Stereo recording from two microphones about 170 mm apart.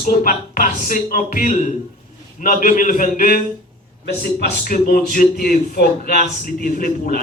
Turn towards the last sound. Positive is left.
turn(degrees=55)  # may be behind; listen again after turning